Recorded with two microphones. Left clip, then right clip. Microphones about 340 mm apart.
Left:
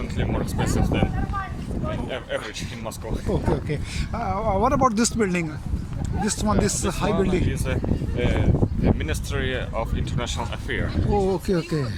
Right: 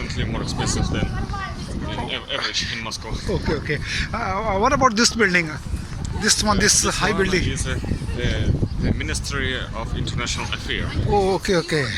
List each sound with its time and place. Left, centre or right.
0.2 s speech: left
3.7 s speech: centre
8.2 s speech: left
11.1 s speech: centre